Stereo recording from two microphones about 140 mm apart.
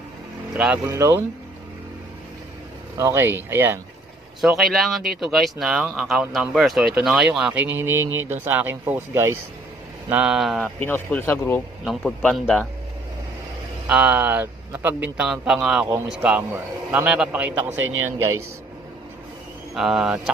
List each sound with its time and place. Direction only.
0.8 s speech: 20° right (ahead or behind)
3.0 s a man's voice: 15° right (ahead or behind)
4.4 s speech: centre (ahead or behind)
10.9 s a man's voice: 15° left (ahead or behind)
11.8 s speech: centre (ahead or behind)
13.8 s a man's voice: 10° right (ahead or behind)
19.7 s speech: centre (ahead or behind)